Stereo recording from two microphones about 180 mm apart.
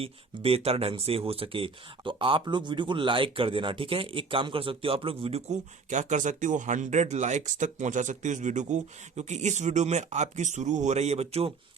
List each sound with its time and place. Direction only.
0.0 s speech: 35° right (ahead or behind)